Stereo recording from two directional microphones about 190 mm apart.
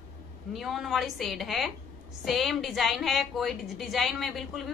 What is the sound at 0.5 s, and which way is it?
A woman's voice, centre (ahead or behind).